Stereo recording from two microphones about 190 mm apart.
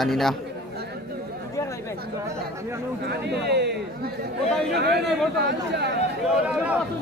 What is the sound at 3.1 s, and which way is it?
Chatter, 60° right (ahead or behind).